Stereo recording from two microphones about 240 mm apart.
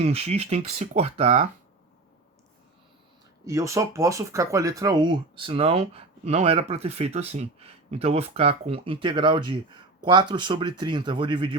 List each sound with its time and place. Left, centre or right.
0.0 s speech: right
3.4 s speech: centre